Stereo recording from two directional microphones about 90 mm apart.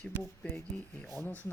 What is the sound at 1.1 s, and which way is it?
Speech, 25° left (ahead or behind).